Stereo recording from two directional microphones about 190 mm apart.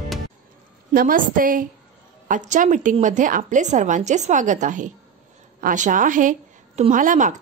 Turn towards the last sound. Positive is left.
turn(degrees=-45)  # may be behind; listen again after turning